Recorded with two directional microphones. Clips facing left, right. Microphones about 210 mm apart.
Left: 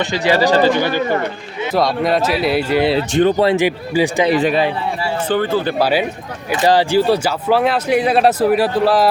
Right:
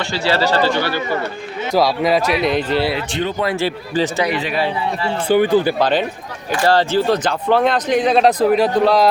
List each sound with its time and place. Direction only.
0.0 s speech: 15° left (ahead or behind)
1.7 s speech: centre (ahead or behind)
3.1 s speech: 45° left (ahead or behind)
3.4 s speech: 20° left (ahead or behind)
5.3 s speech: 15° right (ahead or behind)
5.8 s speech: 10° left (ahead or behind)